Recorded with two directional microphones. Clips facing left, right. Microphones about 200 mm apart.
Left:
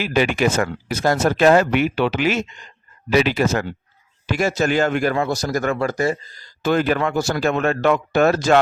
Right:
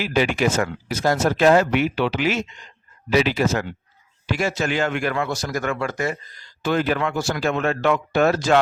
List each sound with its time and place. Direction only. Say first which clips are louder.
0.0 s speech: left 2 dB; 55° left (ahead or behind)